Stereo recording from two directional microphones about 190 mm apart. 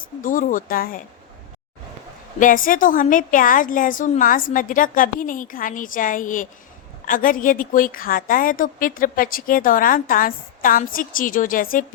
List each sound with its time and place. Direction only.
0.2 s a woman's voice: 45° left (ahead or behind)
2.4 s a woman's voice: 45° left (ahead or behind)